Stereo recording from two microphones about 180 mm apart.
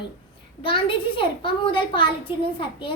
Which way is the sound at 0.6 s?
30° left (ahead or behind).